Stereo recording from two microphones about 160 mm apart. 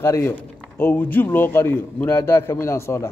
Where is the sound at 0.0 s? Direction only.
15° left (ahead or behind).